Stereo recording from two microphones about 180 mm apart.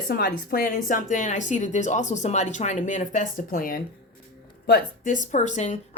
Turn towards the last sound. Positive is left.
turn(degrees=40)  # may be behind; listen again after turning